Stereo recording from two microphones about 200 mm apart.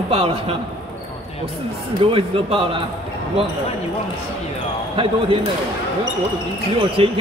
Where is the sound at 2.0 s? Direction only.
25° right (ahead or behind).